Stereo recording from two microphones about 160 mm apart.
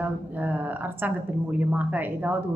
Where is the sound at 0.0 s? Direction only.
10° right (ahead or behind).